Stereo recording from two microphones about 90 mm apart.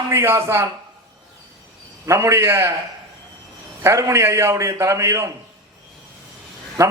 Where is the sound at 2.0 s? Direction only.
35° right (ahead or behind).